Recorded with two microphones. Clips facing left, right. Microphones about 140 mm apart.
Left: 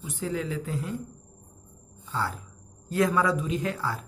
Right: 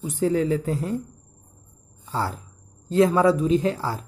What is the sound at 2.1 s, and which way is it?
Speech, 35° right (ahead or behind).